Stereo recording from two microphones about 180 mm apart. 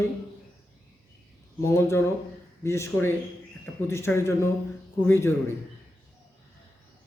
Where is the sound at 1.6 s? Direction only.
15° left (ahead or behind).